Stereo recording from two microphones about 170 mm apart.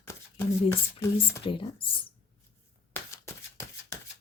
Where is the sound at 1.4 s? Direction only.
30° left (ahead or behind).